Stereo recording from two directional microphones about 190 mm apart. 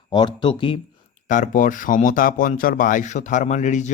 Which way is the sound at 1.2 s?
45° left (ahead or behind).